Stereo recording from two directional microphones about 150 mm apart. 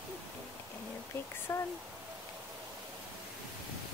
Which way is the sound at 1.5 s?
20° left (ahead or behind).